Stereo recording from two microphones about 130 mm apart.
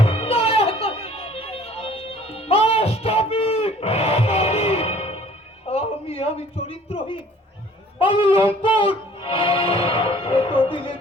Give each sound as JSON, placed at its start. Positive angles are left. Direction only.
{"t": 0.0, "sound": "music", "side_deg": 50}
{"t": 5.6, "sound": "a sound", "side_deg": 50}
{"t": 7.9, "sound": "music", "side_deg": 45}